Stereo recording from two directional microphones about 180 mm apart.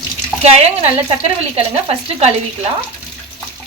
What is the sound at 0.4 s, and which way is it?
Speech, 35° right (ahead or behind).